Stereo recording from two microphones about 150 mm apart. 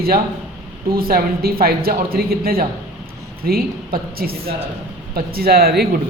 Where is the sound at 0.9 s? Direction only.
80° right.